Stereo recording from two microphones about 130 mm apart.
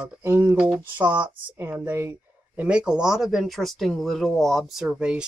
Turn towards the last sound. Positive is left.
turn(degrees=-5)  # may be behind; listen again after turning